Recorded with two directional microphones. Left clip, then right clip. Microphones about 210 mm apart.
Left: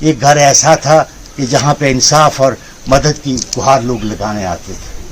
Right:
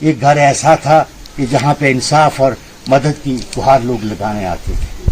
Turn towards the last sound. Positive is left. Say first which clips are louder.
# left 1 dB
turn(degrees=10)  # may be behind; listen again after turning